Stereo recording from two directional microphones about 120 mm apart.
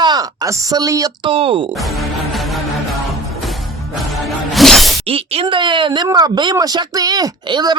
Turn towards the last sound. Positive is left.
turn(degrees=-40)  # may be behind; listen again after turning